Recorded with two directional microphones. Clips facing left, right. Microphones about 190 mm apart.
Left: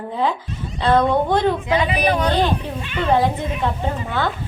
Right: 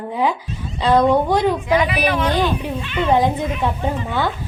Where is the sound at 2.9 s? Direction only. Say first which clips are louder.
Right 1 dB; 15° right (ahead or behind).